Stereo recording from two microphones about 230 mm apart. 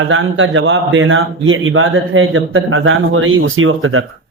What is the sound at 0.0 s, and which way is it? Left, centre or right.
A man's voice, right.